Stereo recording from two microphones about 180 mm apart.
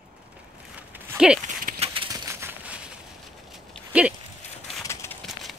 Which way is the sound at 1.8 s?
30° right (ahead or behind).